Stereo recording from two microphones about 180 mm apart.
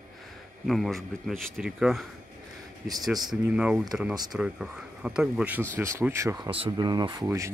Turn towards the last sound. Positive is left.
turn(degrees=-15)  # may be behind; listen again after turning